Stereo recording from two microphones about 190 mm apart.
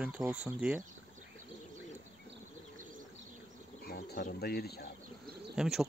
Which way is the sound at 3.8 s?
55° left (ahead or behind).